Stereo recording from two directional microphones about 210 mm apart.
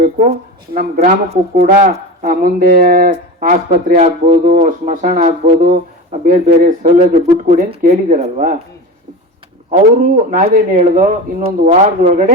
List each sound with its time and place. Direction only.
0.0 s speech: 40° right (ahead or behind)
1.3 s speech: 30° right (ahead or behind)
2.2 s speech: 45° right (ahead or behind)
10.2 s speech: 40° right (ahead or behind)